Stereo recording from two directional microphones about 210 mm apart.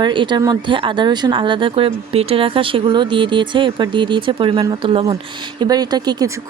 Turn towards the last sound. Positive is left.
turn(degrees=-20)  # may be behind; listen again after turning